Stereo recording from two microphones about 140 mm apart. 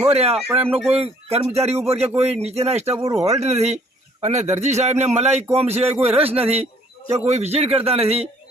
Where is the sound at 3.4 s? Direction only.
50° right (ahead or behind).